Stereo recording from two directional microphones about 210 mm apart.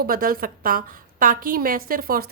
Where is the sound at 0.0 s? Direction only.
45° right (ahead or behind).